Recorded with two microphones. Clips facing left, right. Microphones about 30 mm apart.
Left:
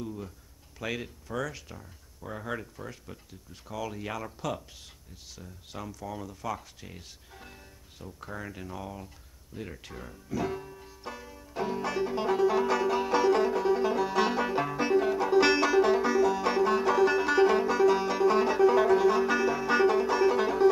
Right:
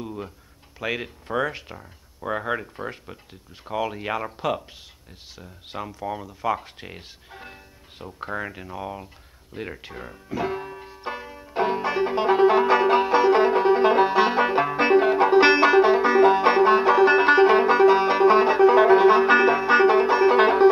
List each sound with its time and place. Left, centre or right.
0.0 s a sound: right
0.7 s speech: right
8.5 s music: right
14.1 s banjo: right
20.3 s music: right